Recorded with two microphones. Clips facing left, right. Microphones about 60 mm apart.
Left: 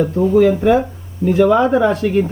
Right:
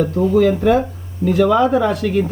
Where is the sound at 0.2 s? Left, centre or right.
Centre.